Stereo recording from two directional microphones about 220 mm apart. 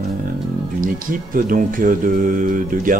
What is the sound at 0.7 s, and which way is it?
Speech, 40° right (ahead or behind).